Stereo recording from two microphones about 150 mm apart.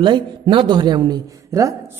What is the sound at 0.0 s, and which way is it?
A man's voice, 35° right (ahead or behind).